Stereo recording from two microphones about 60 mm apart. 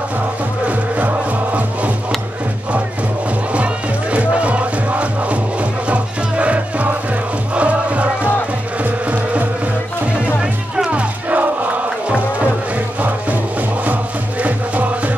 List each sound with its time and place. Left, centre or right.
0.7 s music: right
3.5 s music: right
10.9 s music: right